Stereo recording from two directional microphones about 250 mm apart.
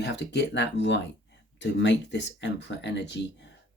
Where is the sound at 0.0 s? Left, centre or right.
Left.